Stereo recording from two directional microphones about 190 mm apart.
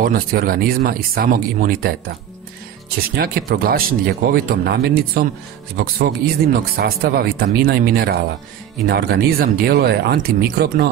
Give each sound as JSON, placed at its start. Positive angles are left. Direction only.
{"t": 0.0, "sound": "speech", "side_deg": -50}
{"t": 3.2, "sound": "speech", "side_deg": -50}